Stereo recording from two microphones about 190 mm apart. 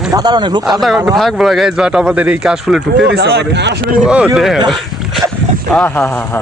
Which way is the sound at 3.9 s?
5° right (ahead or behind).